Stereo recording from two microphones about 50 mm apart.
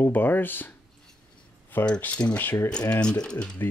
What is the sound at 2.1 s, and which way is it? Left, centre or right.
Speech, left.